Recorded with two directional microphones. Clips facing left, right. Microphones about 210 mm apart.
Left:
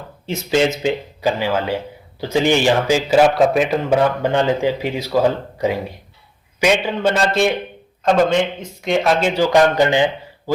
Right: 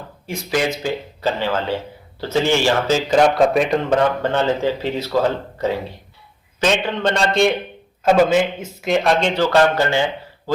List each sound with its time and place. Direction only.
0.3 s a man's voice: 25° left (ahead or behind)